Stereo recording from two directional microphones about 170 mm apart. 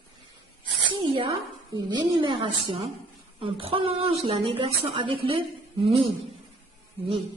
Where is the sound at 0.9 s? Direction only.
30° right (ahead or behind).